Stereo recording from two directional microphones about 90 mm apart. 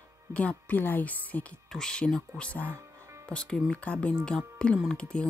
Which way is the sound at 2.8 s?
35° right (ahead or behind).